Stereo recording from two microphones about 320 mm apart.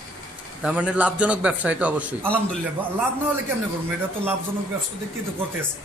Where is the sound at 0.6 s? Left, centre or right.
Centre.